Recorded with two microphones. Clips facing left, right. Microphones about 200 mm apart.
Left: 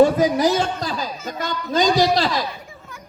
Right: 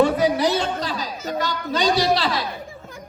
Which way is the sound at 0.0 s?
45° left (ahead or behind).